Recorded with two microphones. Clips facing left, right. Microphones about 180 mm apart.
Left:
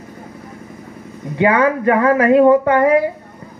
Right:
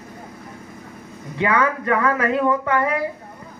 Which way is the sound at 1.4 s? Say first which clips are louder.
Left 6 dB; 30° left (ahead or behind).